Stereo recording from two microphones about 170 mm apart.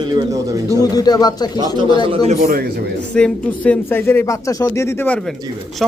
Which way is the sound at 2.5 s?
60° right (ahead or behind).